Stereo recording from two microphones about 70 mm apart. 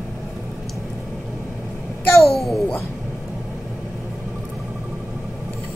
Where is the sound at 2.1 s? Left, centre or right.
Centre.